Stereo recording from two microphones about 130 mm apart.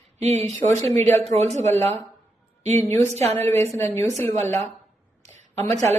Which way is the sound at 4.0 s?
60° right (ahead or behind).